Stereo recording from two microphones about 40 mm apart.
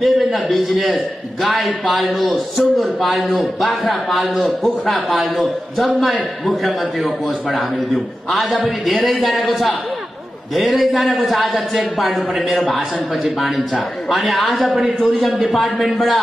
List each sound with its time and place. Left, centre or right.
0.0 s a man's voice: centre